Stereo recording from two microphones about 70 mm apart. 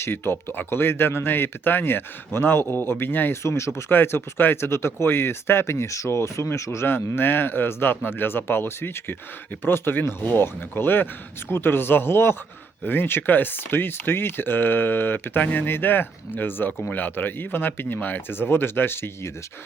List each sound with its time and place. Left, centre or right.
0.0 s speech: left
3.4 s speech: left